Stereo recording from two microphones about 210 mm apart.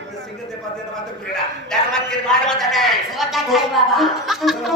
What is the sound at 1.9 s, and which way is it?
A man's voice, 5° left (ahead or behind).